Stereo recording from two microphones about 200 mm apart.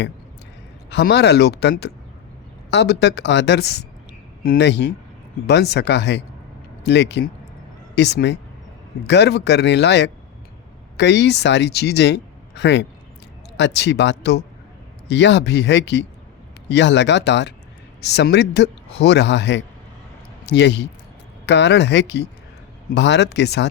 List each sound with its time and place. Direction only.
0.9 s a man's voice: 55° left (ahead or behind)